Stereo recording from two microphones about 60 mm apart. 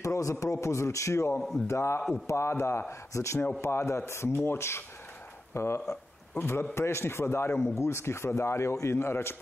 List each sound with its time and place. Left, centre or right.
0.0 s a man's voice: left